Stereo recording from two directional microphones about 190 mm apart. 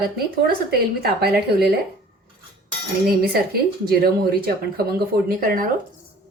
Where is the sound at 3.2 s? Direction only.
55° right (ahead or behind).